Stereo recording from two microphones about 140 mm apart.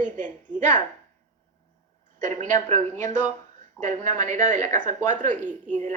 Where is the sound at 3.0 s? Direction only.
60° right (ahead or behind).